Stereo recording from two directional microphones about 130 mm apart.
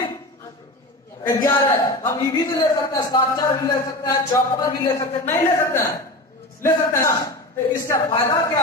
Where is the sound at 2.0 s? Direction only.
30° left (ahead or behind).